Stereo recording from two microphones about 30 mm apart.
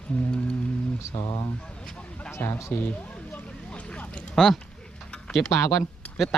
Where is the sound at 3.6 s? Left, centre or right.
Left.